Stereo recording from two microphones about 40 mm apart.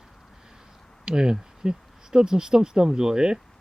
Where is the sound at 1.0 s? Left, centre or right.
Centre.